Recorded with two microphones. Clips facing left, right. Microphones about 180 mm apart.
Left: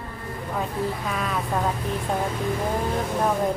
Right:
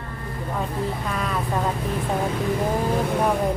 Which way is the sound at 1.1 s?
Centre (ahead or behind).